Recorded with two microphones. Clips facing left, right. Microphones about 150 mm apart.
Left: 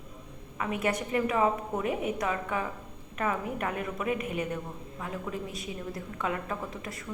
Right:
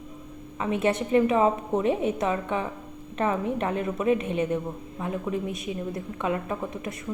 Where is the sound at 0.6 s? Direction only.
25° right (ahead or behind).